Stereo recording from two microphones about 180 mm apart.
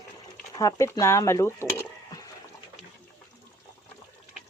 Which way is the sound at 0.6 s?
15° left (ahead or behind).